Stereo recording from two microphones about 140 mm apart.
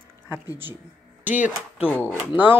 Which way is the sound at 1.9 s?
10° left (ahead or behind).